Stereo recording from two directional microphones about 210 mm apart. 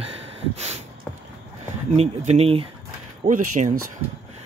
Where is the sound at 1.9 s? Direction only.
30° right (ahead or behind).